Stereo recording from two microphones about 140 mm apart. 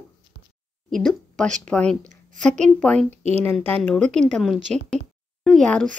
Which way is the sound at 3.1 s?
50° right (ahead or behind).